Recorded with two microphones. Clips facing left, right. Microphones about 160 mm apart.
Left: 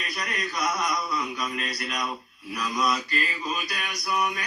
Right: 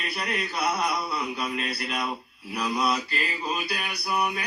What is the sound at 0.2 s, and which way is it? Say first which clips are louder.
Yodeling: right 1 dB; 30° right (ahead or behind).